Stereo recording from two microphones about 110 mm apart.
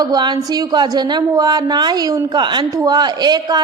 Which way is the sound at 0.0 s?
40° right (ahead or behind).